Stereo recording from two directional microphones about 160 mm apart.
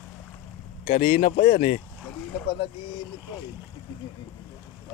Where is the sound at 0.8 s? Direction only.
65° left (ahead or behind).